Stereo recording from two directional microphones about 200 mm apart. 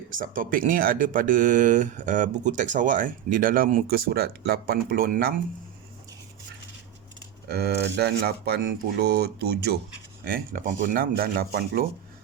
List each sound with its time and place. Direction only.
0.1 s speech: 45° right (ahead or behind)
7.4 s speech: 55° right (ahead or behind)